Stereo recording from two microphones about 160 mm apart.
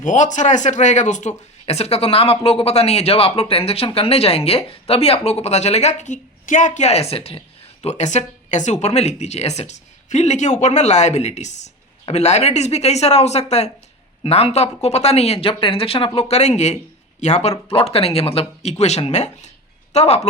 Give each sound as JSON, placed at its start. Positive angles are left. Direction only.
{"t": 0.0, "sound": "speech", "side_deg": 50}